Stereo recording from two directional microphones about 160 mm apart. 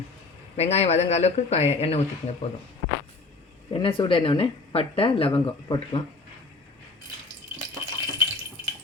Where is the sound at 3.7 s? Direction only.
35° left (ahead or behind).